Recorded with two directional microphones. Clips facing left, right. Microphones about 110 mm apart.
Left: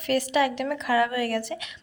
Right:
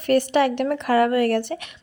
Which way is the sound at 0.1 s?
60° right (ahead or behind).